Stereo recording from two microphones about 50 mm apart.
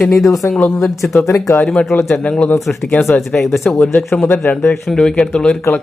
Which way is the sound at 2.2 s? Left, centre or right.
Left.